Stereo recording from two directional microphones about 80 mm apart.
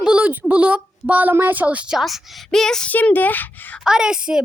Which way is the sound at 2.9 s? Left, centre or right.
Left.